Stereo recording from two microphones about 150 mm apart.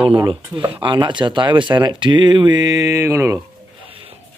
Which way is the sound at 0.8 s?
30° right (ahead or behind).